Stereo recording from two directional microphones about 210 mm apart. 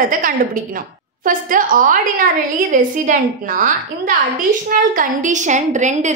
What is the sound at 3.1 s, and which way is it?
A woman's voice, 40° right (ahead or behind).